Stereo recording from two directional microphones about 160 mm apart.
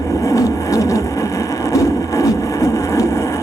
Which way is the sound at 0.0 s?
20° left (ahead or behind).